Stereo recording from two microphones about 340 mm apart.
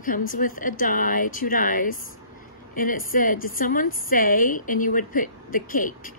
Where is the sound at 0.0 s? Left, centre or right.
Left.